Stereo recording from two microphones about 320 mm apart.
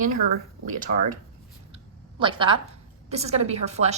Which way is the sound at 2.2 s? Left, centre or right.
Centre.